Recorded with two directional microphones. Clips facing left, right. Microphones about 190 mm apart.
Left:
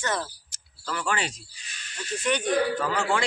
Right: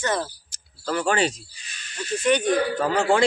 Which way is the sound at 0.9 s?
35° right (ahead or behind).